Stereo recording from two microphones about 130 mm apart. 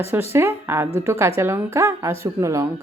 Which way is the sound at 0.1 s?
20° right (ahead or behind).